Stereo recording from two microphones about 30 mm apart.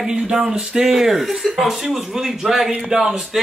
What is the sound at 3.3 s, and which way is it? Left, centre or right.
Speech, centre.